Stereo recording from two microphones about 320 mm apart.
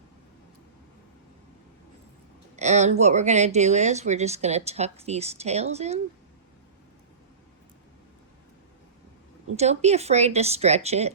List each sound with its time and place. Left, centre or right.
2.6 s speech: right
9.6 s speech: centre